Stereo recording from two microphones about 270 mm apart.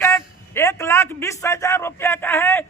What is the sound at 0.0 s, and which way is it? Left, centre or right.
A man's voice, centre.